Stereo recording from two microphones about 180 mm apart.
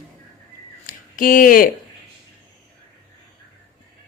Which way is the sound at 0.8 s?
50° left (ahead or behind).